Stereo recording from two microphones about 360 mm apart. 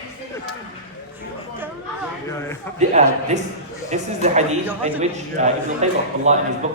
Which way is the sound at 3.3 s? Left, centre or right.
Centre.